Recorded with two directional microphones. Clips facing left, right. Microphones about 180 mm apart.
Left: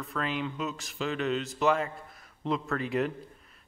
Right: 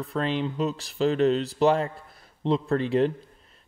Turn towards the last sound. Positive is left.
turn(degrees=-30)  # may be behind; listen again after turning